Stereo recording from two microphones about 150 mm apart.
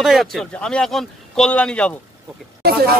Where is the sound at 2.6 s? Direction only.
90° right.